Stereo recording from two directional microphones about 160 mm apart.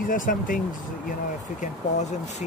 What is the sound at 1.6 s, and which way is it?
Speech, 45° left (ahead or behind).